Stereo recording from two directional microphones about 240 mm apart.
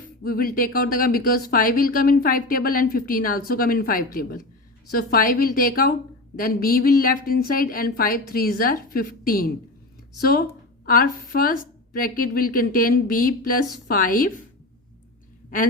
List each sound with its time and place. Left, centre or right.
0.0 s speech: left
15.4 s a woman's voice: left